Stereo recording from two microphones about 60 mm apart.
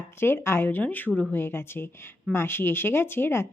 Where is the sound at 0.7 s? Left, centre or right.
Left.